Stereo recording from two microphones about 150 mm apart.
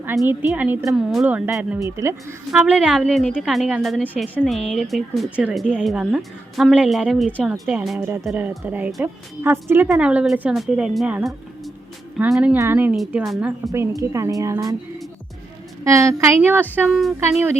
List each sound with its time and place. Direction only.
0.3 s a woman's voice: 10° right (ahead or behind)
0.9 s speech: centre (ahead or behind)
1.8 s a woman's voice: 20° right (ahead or behind)
2.5 s a woman's voice: 5° right (ahead or behind)
13.2 s speech: centre (ahead or behind)
13.7 s a woman's voice: 20° right (ahead or behind)
15.8 s a woman's voice: 20° right (ahead or behind)
16.7 s speech: 5° right (ahead or behind)
17.2 s a woman's voice: 15° right (ahead or behind)